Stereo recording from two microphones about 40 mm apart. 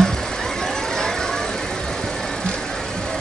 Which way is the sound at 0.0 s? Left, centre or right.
Centre.